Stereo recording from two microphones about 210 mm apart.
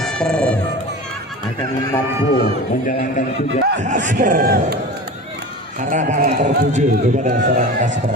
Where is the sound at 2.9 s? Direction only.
45° left (ahead or behind).